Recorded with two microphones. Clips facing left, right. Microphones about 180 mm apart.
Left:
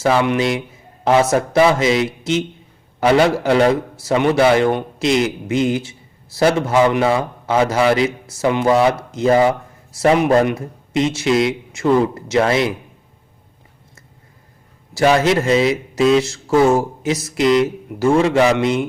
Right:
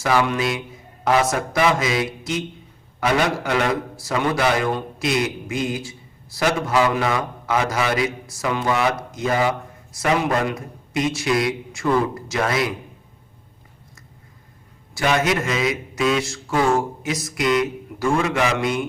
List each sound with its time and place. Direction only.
0.0 s a man's voice: 25° left (ahead or behind)
14.9 s a man's voice: 30° left (ahead or behind)